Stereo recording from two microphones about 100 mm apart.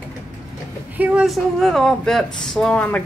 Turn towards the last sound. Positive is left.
turn(degrees=15)  # may be behind; listen again after turning